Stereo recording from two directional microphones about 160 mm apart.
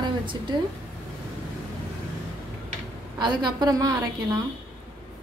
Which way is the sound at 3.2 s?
30° right (ahead or behind).